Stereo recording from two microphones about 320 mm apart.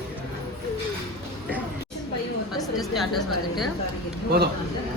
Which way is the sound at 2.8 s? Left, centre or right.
Centre.